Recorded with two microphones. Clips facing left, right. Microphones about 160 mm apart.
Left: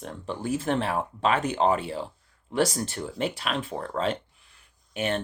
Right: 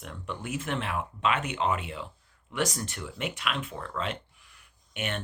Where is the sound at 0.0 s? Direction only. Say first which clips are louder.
Left 5 dB; 35° left (ahead or behind).